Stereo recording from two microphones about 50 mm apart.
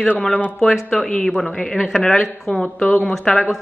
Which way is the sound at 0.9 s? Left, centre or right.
Centre.